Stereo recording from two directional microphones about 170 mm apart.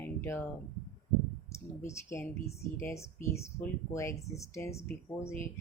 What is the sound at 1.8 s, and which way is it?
Speech, 15° left (ahead or behind).